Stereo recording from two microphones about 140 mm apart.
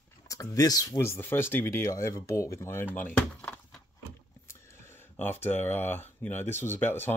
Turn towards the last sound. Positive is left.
turn(degrees=15)  # may be behind; listen again after turning